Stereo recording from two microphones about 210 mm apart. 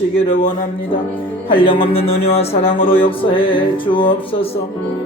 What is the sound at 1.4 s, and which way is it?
Speech, 25° left (ahead or behind).